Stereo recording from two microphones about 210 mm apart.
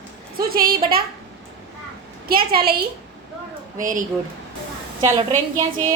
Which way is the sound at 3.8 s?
40° right (ahead or behind).